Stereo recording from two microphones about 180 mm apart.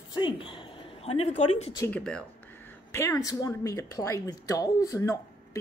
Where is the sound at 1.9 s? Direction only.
5° left (ahead or behind).